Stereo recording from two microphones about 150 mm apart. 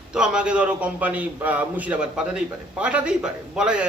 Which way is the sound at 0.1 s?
5° right (ahead or behind).